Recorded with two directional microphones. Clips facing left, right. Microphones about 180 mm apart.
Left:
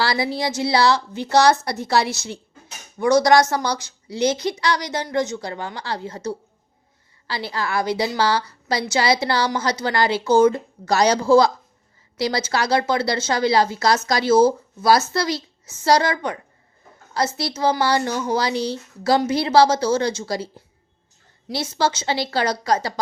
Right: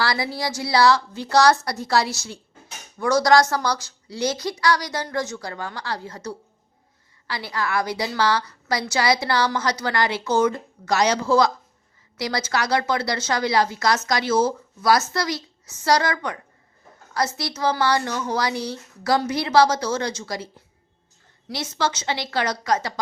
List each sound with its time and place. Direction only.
0.0 s a woman's voice: 25° left (ahead or behind)
21.5 s a woman's voice: 30° left (ahead or behind)